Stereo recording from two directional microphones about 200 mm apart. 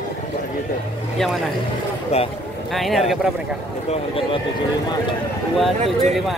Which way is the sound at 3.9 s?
25° left (ahead or behind).